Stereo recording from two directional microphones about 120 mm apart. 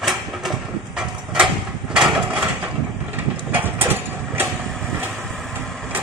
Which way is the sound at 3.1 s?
15° right (ahead or behind).